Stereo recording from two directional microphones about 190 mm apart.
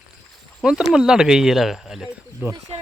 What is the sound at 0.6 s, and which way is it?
Speech, 5° right (ahead or behind).